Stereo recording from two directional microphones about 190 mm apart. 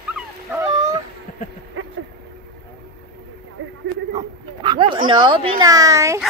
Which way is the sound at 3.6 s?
90° right.